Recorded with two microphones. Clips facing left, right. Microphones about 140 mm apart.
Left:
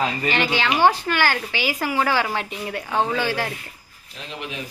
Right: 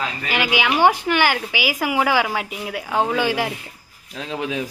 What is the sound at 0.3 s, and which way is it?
Speech, 10° right (ahead or behind).